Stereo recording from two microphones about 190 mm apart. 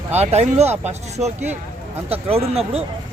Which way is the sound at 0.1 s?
35° right (ahead or behind).